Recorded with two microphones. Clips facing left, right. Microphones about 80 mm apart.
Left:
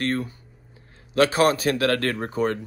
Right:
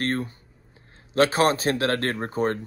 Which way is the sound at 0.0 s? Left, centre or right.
Right.